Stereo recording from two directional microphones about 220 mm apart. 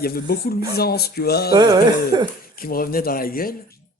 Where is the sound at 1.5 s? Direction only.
20° right (ahead or behind).